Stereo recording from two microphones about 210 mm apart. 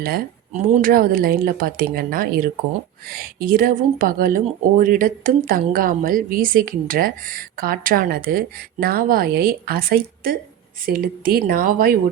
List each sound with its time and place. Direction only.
0.0 s speech: 40° right (ahead or behind)